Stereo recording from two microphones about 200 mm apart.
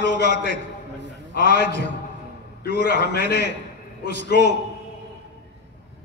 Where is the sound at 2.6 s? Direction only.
50° left (ahead or behind).